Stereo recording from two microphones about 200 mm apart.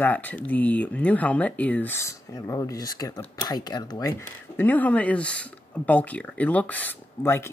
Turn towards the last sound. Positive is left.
turn(degrees=10)  # may be behind; listen again after turning